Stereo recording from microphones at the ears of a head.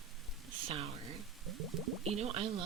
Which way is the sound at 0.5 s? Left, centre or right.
Right.